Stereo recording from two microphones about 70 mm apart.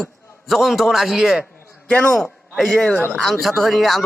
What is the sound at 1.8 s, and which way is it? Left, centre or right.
A man's voice, centre.